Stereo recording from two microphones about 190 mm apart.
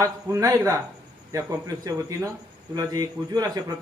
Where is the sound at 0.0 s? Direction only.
15° right (ahead or behind).